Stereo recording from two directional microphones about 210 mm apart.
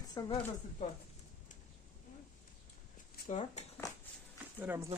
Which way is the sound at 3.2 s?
35° left (ahead or behind).